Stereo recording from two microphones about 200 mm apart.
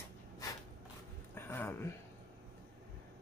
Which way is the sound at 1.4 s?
10° left (ahead or behind).